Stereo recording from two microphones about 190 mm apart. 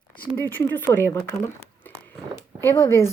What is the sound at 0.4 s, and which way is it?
Speech, 10° left (ahead or behind).